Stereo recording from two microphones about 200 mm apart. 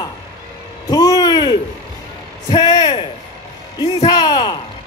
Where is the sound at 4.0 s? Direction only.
20° left (ahead or behind).